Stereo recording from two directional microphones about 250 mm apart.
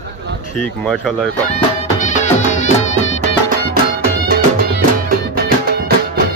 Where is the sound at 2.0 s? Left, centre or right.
Left.